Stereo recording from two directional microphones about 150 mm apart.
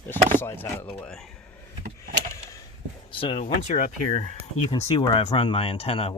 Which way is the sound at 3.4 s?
55° left (ahead or behind).